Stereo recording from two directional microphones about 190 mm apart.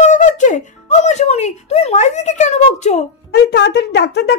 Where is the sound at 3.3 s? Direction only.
60° left (ahead or behind).